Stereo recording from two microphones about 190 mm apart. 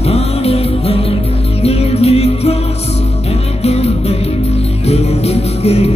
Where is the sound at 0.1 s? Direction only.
30° left (ahead or behind).